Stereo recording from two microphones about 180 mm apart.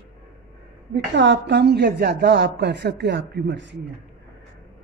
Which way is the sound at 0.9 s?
80° right.